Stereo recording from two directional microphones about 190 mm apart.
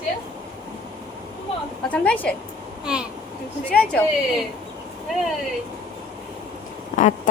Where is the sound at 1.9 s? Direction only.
5° left (ahead or behind).